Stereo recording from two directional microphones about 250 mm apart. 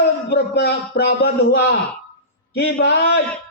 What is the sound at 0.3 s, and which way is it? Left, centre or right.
A man's voice, left.